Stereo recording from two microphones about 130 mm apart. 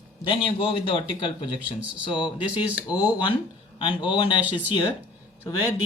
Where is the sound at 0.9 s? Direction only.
40° left (ahead or behind).